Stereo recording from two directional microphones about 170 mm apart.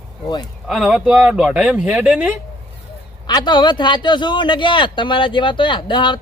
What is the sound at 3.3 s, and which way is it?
Speech, 25° left (ahead or behind).